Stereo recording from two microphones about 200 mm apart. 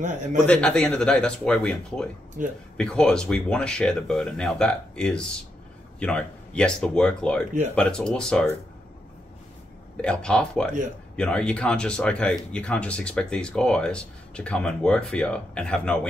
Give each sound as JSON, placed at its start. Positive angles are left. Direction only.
{"t": 0.5, "sound": "speech", "side_deg": 5}
{"t": 2.4, "sound": "speech", "side_deg": -40}
{"t": 2.8, "sound": "speech", "side_deg": 5}
{"t": 10.0, "sound": "speech", "side_deg": 5}